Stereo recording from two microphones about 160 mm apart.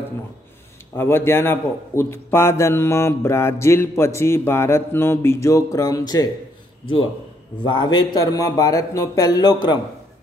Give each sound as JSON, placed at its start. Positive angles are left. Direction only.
{"t": 0.9, "sound": "a man's voice", "side_deg": 15}
{"t": 7.6, "sound": "speech", "side_deg": 30}